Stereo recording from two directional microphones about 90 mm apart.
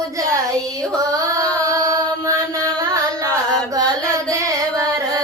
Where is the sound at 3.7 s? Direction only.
40° right (ahead or behind).